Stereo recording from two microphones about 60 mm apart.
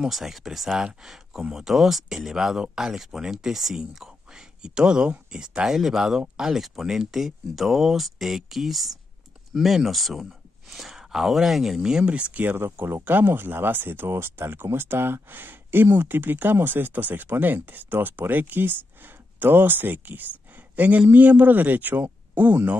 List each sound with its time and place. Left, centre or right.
0.0 s speech: centre; by 12.4 s right
12.4 s a man's voice: right